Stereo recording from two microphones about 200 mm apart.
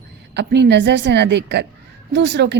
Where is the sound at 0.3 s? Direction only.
60° right (ahead or behind).